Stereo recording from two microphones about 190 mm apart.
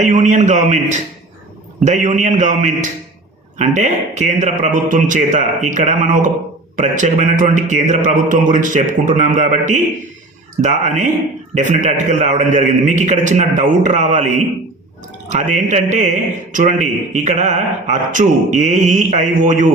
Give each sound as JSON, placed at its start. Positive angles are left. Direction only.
{"t": 0.0, "sound": "a man's voice", "side_deg": -40}